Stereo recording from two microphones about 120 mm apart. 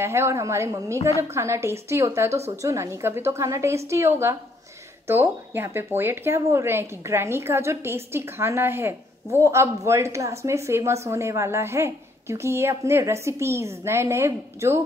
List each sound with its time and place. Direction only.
0.0 s a woman's voice: 20° right (ahead or behind)